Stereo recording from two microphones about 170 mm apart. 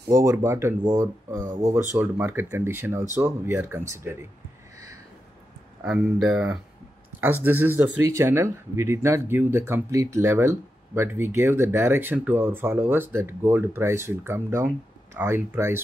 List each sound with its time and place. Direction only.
0.1 s speech: 15° right (ahead or behind)
5.9 s speech: centre (ahead or behind)